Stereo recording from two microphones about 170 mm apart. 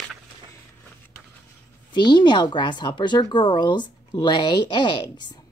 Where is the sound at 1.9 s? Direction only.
25° left (ahead or behind).